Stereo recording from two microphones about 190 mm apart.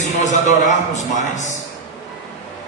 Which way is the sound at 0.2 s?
40° left (ahead or behind).